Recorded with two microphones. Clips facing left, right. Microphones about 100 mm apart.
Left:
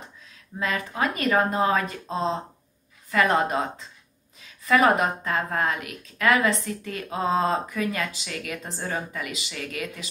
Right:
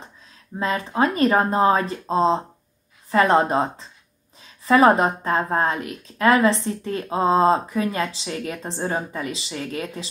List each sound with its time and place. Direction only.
0.6 s a woman's voice: 30° right (ahead or behind)